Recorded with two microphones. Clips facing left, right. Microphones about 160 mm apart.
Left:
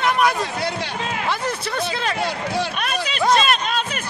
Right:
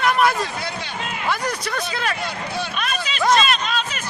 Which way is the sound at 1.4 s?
25° left (ahead or behind).